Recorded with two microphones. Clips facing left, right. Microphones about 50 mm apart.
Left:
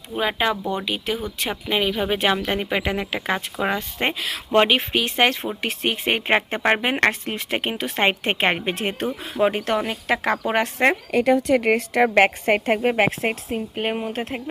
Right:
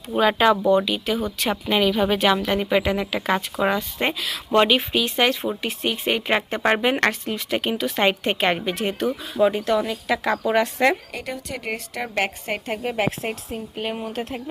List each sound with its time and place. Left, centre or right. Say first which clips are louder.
0.2 s speech: right 5 dB; centre
0.9 s speech: right 2 dB; left
1.5 s speech: right 2 dB; centre
1.8 s a woman's voice: right 3 dB; centre
7.1 s a woman's voice: right 1 dB; left